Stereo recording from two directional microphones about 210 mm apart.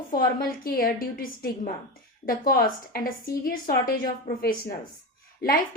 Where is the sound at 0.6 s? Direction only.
45° left (ahead or behind).